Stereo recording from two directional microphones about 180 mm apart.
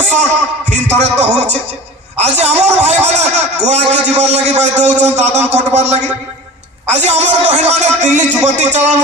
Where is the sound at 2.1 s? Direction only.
35° right (ahead or behind).